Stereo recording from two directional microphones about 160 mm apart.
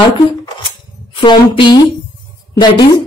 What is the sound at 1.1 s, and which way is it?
A woman's voice, 30° left (ahead or behind).